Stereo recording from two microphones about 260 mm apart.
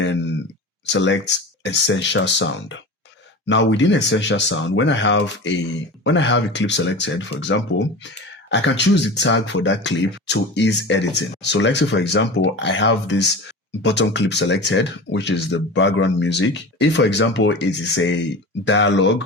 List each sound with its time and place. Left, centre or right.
0.0 s speech: left